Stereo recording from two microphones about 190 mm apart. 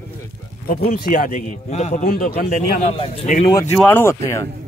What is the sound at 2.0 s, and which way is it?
Speech, 50° left (ahead or behind).